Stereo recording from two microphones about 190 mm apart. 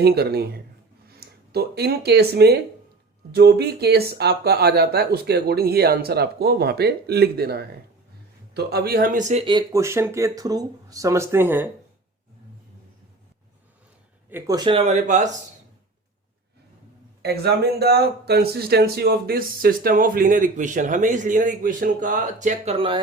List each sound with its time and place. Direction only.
0.0 s speech: 55° right (ahead or behind); by 9.4 s 40° right (ahead or behind)
9.5 s speech: 20° right (ahead or behind)
14.3 s speech: 15° right (ahead or behind); by 15.3 s 40° right (ahead or behind)
17.2 s speech: 55° right (ahead or behind); by 23.0 s 30° right (ahead or behind)